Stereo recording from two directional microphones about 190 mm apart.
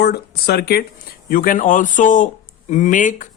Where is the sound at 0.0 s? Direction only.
55° left (ahead or behind).